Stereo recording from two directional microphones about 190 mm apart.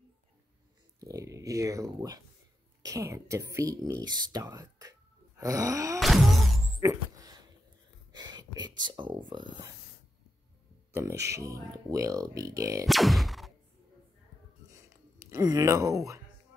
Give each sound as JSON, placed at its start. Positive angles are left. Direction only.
{"t": 1.0, "sound": "speech", "side_deg": -15}
{"t": 5.9, "sound": "a sound", "side_deg": 0}
{"t": 6.8, "sound": "a sound", "side_deg": -20}
{"t": 8.1, "sound": "speech", "side_deg": -20}
{"t": 10.9, "sound": "speech", "side_deg": -15}
{"t": 12.8, "sound": "music", "side_deg": 0}
{"t": 15.1, "sound": "speech", "side_deg": -15}